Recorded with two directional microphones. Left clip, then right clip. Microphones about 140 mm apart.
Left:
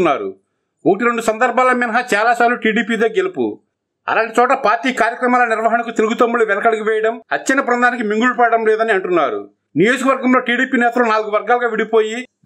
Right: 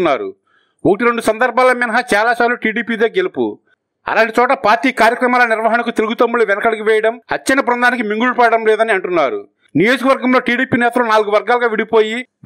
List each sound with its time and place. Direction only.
0.0 s a man's voice: 40° right (ahead or behind)